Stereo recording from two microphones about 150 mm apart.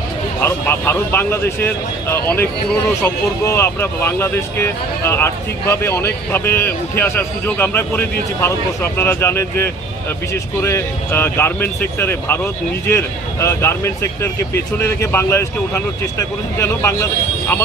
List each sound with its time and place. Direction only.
0.4 s speech: 15° left (ahead or behind)